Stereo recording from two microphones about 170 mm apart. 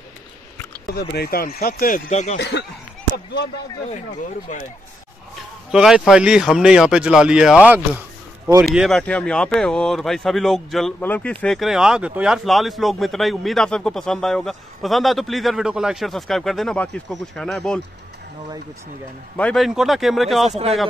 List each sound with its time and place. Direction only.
0.9 s speech: 70° left (ahead or behind)
2.0 s speech: 40° left (ahead or behind)
2.3 s speech: 80° left
5.7 s speech: 5° right (ahead or behind)
19.3 s speech: 5° left (ahead or behind)